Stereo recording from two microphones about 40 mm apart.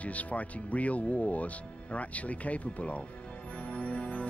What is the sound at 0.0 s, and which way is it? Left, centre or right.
Speech, left.